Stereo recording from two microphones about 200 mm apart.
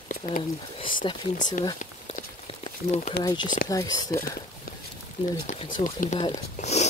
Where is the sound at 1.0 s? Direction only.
25° left (ahead or behind).